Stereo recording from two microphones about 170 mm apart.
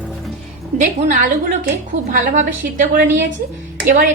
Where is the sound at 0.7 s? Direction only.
45° right (ahead or behind).